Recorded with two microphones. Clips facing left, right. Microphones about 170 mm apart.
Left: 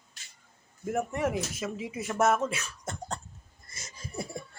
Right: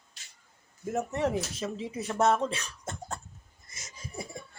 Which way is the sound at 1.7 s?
10° left (ahead or behind).